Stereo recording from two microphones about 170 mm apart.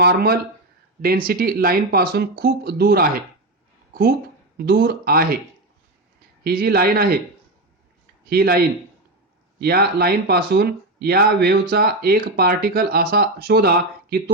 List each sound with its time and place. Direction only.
0.0 s speech: 70° right (ahead or behind)
4.5 s speech: 70° right (ahead or behind)
6.4 s speech: 65° right (ahead or behind)
8.3 s speech: 65° right (ahead or behind)